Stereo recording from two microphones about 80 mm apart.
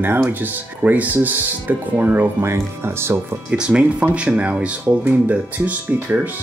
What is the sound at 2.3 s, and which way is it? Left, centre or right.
Speech, right.